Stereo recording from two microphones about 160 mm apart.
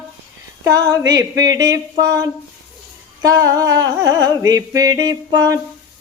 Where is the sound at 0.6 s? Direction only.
25° right (ahead or behind).